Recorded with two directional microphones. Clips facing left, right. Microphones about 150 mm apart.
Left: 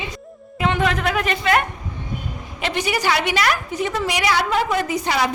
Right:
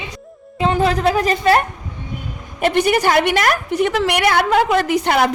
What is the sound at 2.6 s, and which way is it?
A woman's voice, 50° right (ahead or behind).